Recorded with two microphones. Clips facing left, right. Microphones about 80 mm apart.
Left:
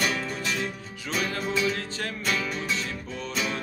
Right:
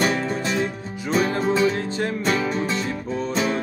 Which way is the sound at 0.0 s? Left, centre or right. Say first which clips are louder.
Right 6 dB; right.